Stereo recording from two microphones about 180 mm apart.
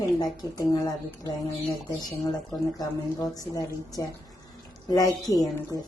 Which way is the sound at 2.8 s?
20° left (ahead or behind).